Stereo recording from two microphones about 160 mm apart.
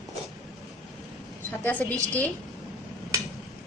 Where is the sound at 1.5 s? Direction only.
10° left (ahead or behind).